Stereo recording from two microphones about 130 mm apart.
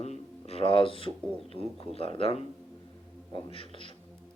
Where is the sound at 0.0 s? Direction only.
55° left (ahead or behind).